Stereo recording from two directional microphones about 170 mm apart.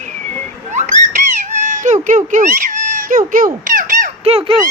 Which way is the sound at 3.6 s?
55° right (ahead or behind).